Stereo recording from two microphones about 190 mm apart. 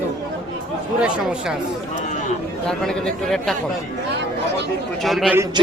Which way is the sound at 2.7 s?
5° left (ahead or behind).